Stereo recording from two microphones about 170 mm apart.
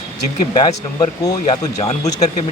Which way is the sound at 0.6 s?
20° left (ahead or behind).